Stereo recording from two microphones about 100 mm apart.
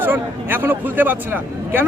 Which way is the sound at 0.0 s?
20° right (ahead or behind).